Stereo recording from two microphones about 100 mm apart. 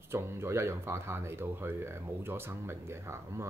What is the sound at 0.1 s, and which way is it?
Speech, 25° right (ahead or behind).